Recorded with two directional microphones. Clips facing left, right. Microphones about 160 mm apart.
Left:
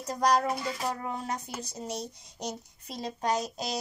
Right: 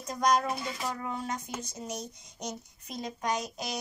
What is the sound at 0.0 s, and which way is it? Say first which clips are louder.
Speech: left 1 dB; 35° left (ahead or behind).